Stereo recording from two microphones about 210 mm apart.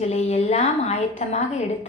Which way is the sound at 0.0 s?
30° left (ahead or behind).